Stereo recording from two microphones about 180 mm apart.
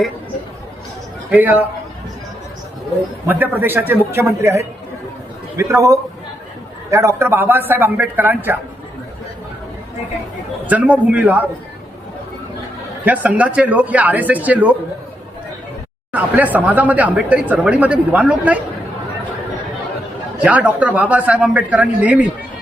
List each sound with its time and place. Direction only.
1.3 s speech: 10° right (ahead or behind)
3.2 s speech: 10° right (ahead or behind)
10.7 s speech: 10° right (ahead or behind)
13.1 s speech: 10° right (ahead or behind)
16.1 s speech: 10° right (ahead or behind)
20.4 s speech: 10° right (ahead or behind)